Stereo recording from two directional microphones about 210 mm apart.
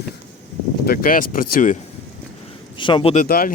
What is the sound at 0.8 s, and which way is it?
Speech, 45° left (ahead or behind).